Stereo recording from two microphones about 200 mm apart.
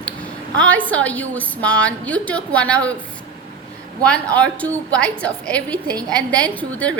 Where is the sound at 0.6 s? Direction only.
10° left (ahead or behind).